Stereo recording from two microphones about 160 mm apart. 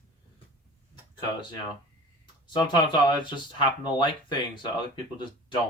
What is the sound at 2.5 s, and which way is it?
Speech, 30° left (ahead or behind).